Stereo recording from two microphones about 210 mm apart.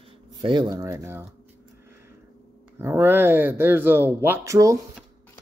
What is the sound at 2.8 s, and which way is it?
Speech, 10° right (ahead or behind).